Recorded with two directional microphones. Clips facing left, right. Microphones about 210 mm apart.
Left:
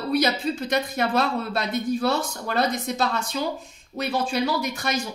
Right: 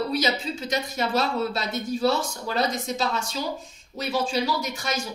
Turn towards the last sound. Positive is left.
turn(degrees=60)  # may be behind; listen again after turning